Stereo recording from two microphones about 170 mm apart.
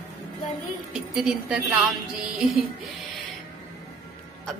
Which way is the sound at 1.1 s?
5° right (ahead or behind).